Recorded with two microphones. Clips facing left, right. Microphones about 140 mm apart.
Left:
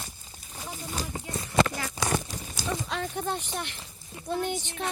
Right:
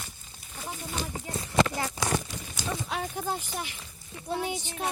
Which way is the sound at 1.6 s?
25° right (ahead or behind).